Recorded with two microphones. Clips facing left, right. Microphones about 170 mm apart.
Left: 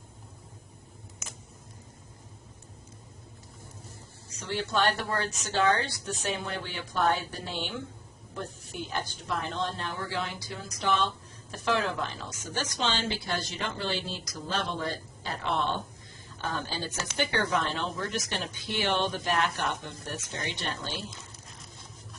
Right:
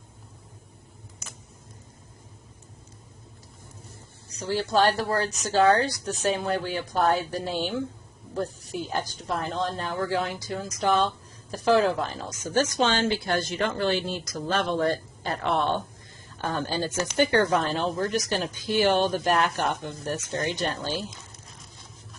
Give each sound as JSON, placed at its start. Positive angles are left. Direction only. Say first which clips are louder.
{"t": 4.3, "sound": "a woman's voice", "louder": "right 5 dB", "side_deg": -35}